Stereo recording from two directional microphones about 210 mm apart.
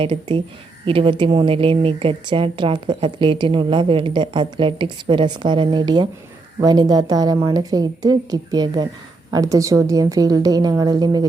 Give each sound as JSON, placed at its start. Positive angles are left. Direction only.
{"t": 0.0, "sound": "speech", "side_deg": -25}